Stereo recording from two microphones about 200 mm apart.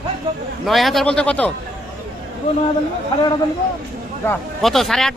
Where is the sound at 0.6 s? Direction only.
Centre (ahead or behind).